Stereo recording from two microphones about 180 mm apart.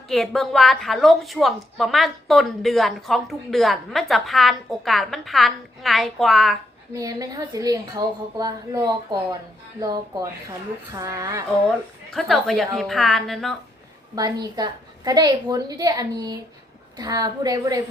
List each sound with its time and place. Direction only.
0.1 s a woman's voice: centre (ahead or behind)
6.9 s a woman's voice: 20° right (ahead or behind)
11.7 s a woman's voice: centre (ahead or behind)
14.4 s a woman's voice: 20° right (ahead or behind)